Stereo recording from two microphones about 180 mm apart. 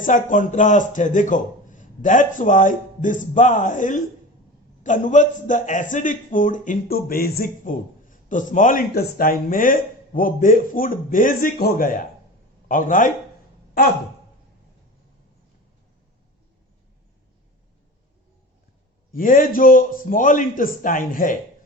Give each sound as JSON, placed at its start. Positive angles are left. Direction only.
{"t": 0.0, "sound": "a man's voice", "side_deg": 45}
{"t": 19.1, "sound": "a man's voice", "side_deg": 50}